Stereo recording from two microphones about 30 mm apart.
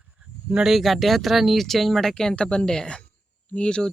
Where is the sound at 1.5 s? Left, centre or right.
Centre.